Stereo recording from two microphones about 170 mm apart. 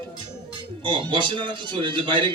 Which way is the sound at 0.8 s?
30° right (ahead or behind).